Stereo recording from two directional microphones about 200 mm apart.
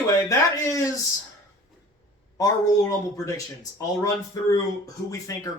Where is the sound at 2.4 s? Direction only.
20° left (ahead or behind).